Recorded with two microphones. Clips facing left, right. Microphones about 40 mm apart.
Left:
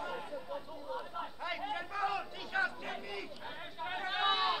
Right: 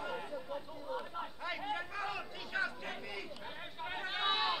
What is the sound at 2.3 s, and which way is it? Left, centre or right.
Chatter, left.